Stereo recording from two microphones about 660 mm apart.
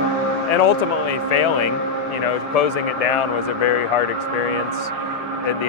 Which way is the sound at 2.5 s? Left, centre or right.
Left.